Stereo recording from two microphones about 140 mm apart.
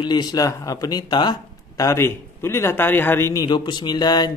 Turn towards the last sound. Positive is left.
turn(degrees=30)  # may be behind; listen again after turning